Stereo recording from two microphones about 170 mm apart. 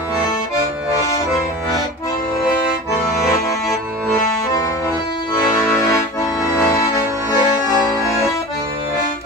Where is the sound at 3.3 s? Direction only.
20° left (ahead or behind).